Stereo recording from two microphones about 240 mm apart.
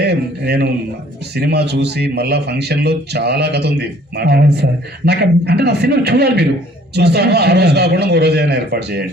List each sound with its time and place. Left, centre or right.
0.0 s speech: right